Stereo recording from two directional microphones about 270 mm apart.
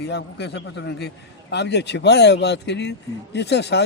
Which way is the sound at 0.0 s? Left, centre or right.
Left.